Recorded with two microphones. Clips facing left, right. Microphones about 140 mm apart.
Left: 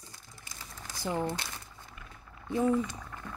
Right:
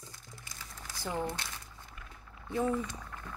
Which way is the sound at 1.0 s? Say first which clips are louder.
Left 3 dB; 15° left (ahead or behind).